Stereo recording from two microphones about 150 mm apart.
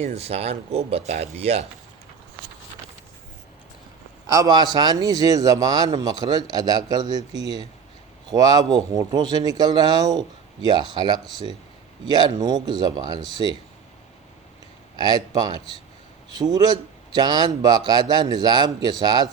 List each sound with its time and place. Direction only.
0.0 s speech: 45° right (ahead or behind)
4.3 s a man's voice: 25° right (ahead or behind)
14.9 s a man's voice: 25° right (ahead or behind)